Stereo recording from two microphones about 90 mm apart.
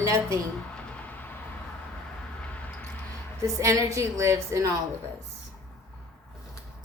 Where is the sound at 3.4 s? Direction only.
40° right (ahead or behind).